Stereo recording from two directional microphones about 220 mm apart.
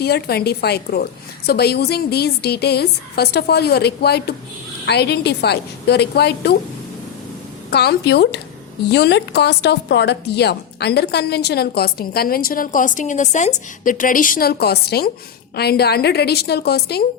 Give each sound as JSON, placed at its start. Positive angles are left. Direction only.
{"t": 0.0, "sound": "speech", "side_deg": 45}
{"t": 7.7, "sound": "speech", "side_deg": 50}